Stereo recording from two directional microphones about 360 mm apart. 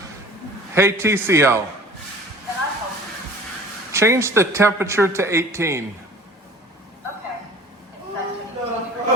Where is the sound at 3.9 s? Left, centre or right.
Centre.